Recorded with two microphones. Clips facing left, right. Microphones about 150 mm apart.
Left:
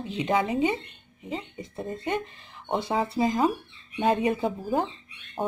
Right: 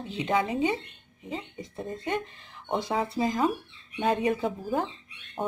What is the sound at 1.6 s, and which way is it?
Speech, 5° left (ahead or behind).